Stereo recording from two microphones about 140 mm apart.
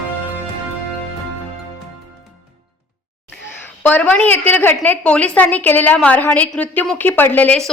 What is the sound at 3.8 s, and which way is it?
A woman's voice, 10° left (ahead or behind).